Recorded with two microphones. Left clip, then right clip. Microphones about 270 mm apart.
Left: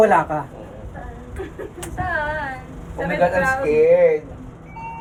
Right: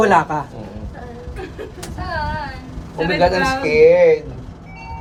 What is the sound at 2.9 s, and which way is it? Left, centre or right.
A woman's voice, right.